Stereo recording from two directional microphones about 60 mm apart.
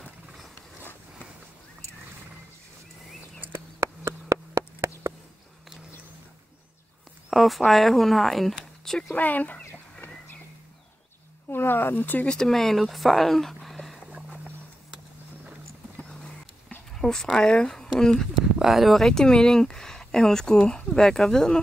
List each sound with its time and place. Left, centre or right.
3.3 s a sound: right
7.2 s speech: centre
9.1 s speech: left
10.0 s vehicle: left
11.5 s speech: left
12.3 s speech: centre
17.0 s speech: centre
18.3 s speech: centre